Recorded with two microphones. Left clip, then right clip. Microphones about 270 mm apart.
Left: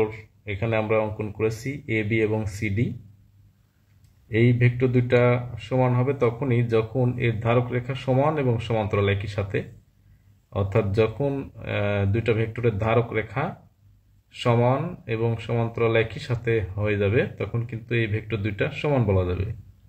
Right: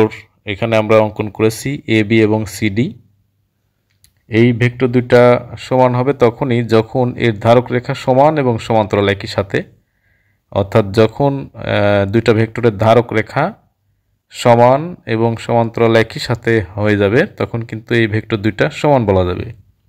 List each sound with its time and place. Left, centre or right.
0.0 s speech: right
4.3 s speech: right